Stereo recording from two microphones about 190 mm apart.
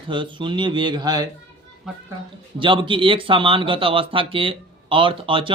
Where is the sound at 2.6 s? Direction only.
25° right (ahead or behind).